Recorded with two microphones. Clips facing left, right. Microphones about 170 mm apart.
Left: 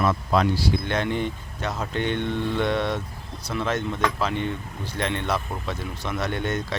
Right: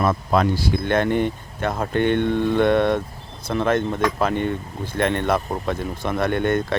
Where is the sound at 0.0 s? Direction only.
50° right (ahead or behind).